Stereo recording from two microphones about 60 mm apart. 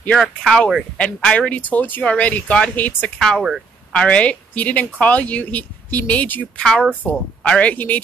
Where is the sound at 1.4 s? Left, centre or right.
Left.